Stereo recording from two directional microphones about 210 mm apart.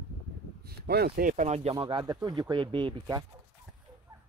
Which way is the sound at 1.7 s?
20° right (ahead or behind).